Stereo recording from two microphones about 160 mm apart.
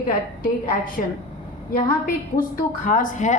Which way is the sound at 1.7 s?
65° left (ahead or behind).